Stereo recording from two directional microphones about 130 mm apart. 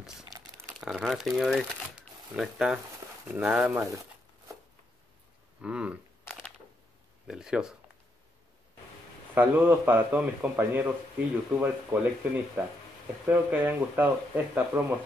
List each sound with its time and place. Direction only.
0.7 s speech: 5° right (ahead or behind); by 4.0 s 20° right (ahead or behind)
5.6 s speech: 10° right (ahead or behind)
7.2 s speech: 5° right (ahead or behind)
9.3 s speech: 15° right (ahead or behind)